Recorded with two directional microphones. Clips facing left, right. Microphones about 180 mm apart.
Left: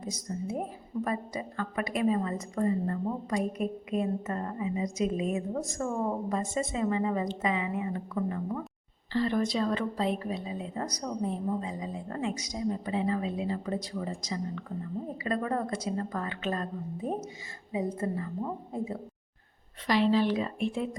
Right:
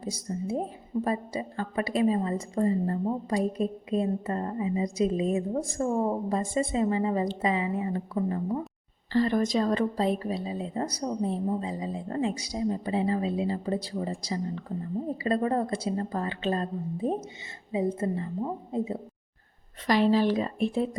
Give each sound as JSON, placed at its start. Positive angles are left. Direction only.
{"t": 0.0, "sound": "a woman's voice", "side_deg": -30}
{"t": 9.1, "sound": "a woman's voice", "side_deg": -45}
{"t": 19.9, "sound": "a woman's voice", "side_deg": -40}